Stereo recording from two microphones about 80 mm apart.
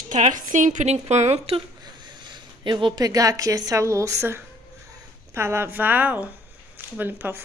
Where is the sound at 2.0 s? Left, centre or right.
Right.